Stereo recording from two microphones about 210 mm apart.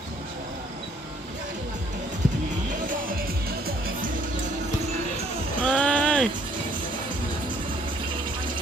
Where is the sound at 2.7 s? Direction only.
45° right (ahead or behind).